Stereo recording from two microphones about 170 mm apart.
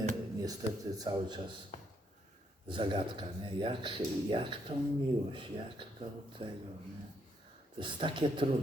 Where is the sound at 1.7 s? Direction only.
50° left (ahead or behind).